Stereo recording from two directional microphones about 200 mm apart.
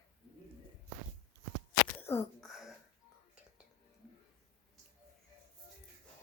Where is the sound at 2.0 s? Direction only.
10° left (ahead or behind).